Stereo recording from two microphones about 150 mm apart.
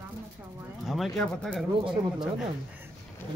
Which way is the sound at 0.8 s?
Centre (ahead or behind).